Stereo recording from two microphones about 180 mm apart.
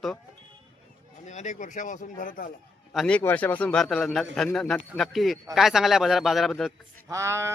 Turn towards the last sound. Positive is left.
turn(degrees=-15)  # may be behind; listen again after turning